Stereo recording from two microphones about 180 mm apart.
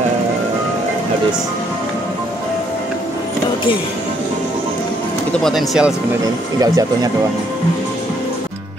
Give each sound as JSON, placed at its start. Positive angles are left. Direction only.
{"t": 5.4, "sound": "speech", "side_deg": 0}
{"t": 6.2, "sound": "speech", "side_deg": -20}